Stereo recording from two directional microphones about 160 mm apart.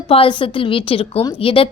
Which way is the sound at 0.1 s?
35° left (ahead or behind).